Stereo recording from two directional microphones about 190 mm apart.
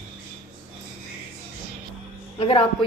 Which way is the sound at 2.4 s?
25° left (ahead or behind).